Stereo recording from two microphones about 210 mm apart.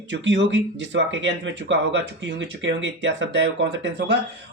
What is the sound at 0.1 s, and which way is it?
Speech, 60° right (ahead or behind).